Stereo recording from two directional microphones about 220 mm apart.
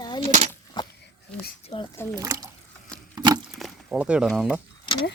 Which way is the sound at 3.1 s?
20° right (ahead or behind).